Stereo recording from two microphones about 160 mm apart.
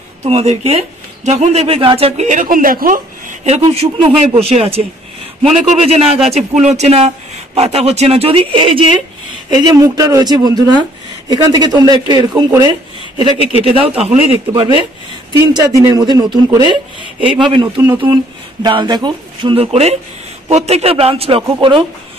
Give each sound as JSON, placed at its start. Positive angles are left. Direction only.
{"t": 0.2, "sound": "speech", "side_deg": -40}
{"t": 9.6, "sound": "a man's voice", "side_deg": -25}
{"t": 13.6, "sound": "speech", "side_deg": -35}
{"t": 14.5, "sound": "a man's voice", "side_deg": -30}